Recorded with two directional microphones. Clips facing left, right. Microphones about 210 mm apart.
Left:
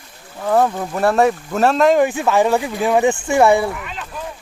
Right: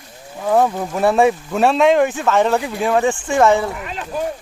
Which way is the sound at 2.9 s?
15° left (ahead or behind).